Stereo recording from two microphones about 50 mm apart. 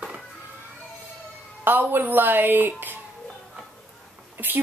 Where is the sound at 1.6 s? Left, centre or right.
Right.